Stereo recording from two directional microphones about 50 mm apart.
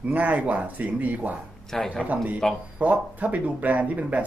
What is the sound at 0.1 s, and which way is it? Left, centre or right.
Speech, right.